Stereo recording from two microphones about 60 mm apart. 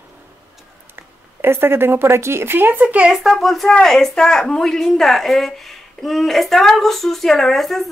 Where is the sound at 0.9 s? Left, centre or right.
Right.